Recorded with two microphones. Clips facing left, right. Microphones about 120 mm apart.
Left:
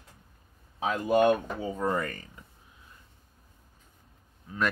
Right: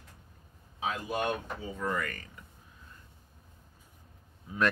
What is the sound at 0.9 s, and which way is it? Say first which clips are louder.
Speech: left 9 dB; 45° left (ahead or behind).